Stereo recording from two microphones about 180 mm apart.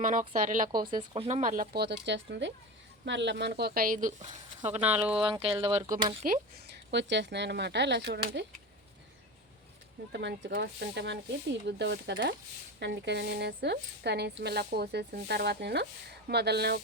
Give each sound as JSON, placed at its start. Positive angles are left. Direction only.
{"t": 0.0, "sound": "speech", "side_deg": -45}
{"t": 0.7, "sound": "speech", "side_deg": -25}
{"t": 1.4, "sound": "speech", "side_deg": -50}
{"t": 2.0, "sound": "speech", "side_deg": -85}
{"t": 4.8, "sound": "speech", "side_deg": -5}
{"t": 5.2, "sound": "speech", "side_deg": -30}
{"t": 5.7, "sound": "speech", "side_deg": -20}
{"t": 6.7, "sound": "speech", "side_deg": -75}
{"t": 10.1, "sound": "speech", "side_deg": -75}
{"t": 10.5, "sound": "speech", "side_deg": -65}